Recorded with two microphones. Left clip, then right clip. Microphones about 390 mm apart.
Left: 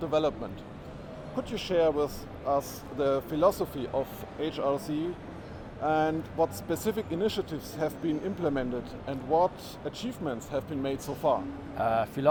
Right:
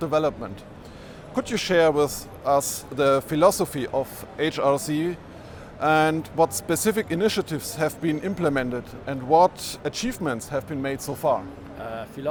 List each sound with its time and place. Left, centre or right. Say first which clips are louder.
0.0 s speech: right 5 dB; right
1.4 s speech: right 7 dB; right
11.8 s speech: left 6 dB; left